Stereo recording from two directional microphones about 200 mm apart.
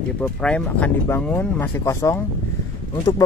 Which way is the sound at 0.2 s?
5° left (ahead or behind).